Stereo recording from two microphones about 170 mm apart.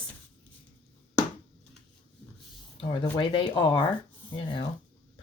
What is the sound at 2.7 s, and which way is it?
Speech, 25° left (ahead or behind).